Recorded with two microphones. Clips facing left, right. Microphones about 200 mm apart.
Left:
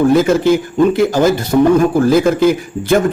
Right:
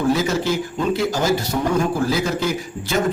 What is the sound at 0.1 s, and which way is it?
A man's voice, 55° left (ahead or behind).